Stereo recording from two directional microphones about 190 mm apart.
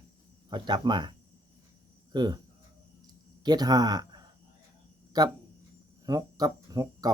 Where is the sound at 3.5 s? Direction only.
20° right (ahead or behind).